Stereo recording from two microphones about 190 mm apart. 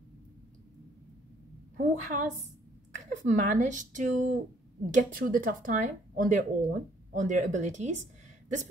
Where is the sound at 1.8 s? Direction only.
40° right (ahead or behind).